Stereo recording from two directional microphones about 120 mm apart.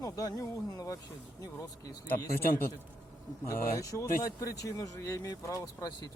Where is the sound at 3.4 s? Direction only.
25° left (ahead or behind).